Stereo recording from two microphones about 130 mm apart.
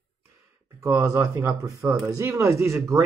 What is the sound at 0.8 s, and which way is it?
Speech, 20° right (ahead or behind).